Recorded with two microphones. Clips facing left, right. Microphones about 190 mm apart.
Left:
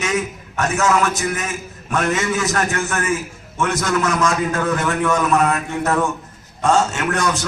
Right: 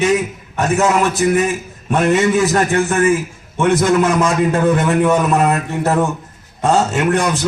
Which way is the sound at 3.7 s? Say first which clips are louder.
Right 7 dB; 30° right (ahead or behind).